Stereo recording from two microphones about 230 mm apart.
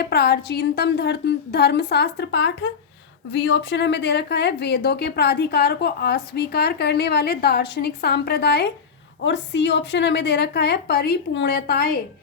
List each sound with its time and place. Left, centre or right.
0.0 s speech: left